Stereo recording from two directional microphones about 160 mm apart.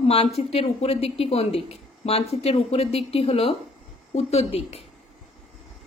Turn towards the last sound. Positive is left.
turn(degrees=40)  # may be behind; listen again after turning